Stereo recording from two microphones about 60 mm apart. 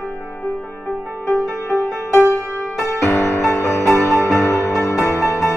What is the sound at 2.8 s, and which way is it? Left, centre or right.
Music, left.